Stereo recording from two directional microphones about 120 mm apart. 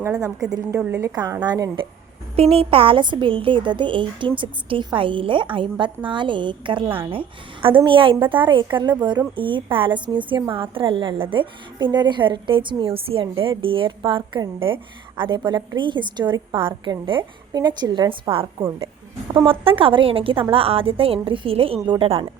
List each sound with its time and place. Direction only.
0.0 s a woman's voice: 25° right (ahead or behind)
1.1 s a woman's voice: 35° right (ahead or behind)
2.3 s a woman's voice: 55° right (ahead or behind)
19.5 s a woman's voice: 50° right (ahead or behind)